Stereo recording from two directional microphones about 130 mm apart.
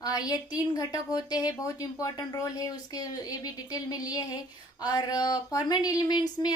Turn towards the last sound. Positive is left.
turn(degrees=30)  # may be behind; listen again after turning